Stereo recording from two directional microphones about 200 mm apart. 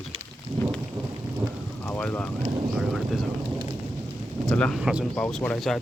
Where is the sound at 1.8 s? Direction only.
10° left (ahead or behind).